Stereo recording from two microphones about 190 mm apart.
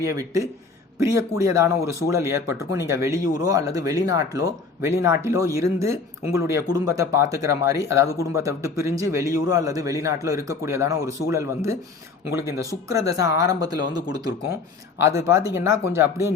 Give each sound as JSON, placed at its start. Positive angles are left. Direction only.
{"t": 0.0, "sound": "speech", "side_deg": -15}
{"t": 14.9, "sound": "speech", "side_deg": -15}